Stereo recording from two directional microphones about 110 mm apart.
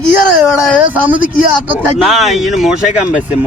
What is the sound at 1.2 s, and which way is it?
Speech, 15° right (ahead or behind).